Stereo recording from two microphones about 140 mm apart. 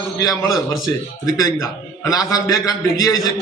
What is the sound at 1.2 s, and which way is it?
A man's voice, 25° left (ahead or behind).